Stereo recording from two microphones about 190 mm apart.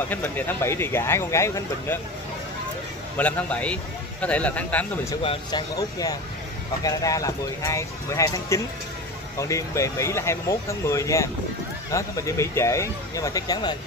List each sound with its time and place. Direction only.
0.1 s speech: 10° left (ahead or behind)
3.2 s speech: 10° left (ahead or behind)
5.1 s speech: 25° left (ahead or behind)